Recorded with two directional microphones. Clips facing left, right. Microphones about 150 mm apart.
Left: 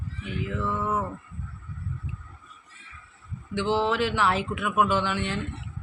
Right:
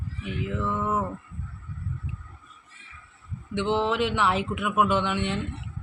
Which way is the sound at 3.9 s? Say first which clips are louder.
Even; 20° right (ahead or behind).